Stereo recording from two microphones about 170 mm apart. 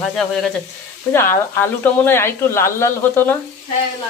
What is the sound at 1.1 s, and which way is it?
Speech, 15° left (ahead or behind).